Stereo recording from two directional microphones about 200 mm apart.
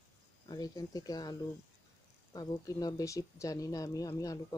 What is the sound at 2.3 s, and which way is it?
Speech, 20° left (ahead or behind).